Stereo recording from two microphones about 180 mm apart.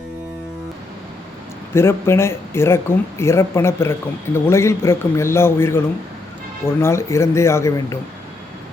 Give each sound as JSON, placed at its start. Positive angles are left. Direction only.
{"t": 1.7, "sound": "speech", "side_deg": 15}